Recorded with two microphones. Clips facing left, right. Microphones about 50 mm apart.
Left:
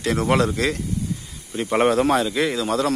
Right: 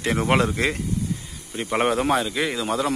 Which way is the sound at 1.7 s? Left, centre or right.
Centre.